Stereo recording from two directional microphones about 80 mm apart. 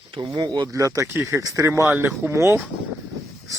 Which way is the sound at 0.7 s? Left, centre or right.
Right.